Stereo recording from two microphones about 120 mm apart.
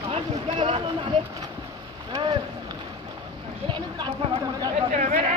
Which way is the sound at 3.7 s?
40° right (ahead or behind).